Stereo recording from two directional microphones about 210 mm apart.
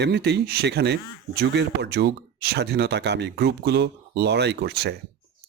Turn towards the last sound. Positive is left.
turn(degrees=-50)  # may be behind; listen again after turning